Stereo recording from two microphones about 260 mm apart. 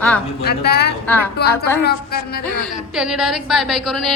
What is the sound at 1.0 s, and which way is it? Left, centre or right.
Speech, centre.